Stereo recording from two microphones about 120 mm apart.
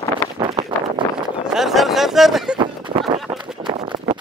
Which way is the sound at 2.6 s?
45° right (ahead or behind).